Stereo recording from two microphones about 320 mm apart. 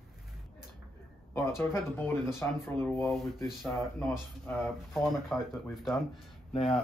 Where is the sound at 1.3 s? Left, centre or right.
Centre.